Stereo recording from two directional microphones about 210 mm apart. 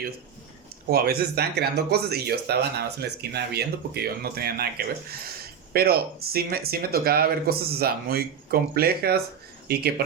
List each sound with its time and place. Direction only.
0.9 s speech: 50° right (ahead or behind)
5.7 s speech: 45° right (ahead or behind)